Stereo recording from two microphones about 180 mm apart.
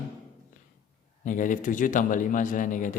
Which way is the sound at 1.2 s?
45° left (ahead or behind).